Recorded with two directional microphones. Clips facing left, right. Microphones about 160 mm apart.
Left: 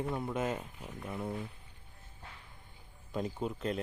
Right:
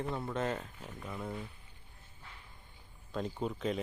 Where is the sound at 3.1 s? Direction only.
5° left (ahead or behind).